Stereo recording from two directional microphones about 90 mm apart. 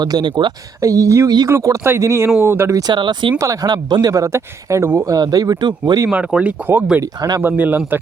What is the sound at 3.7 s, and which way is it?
Speech, 50° right (ahead or behind).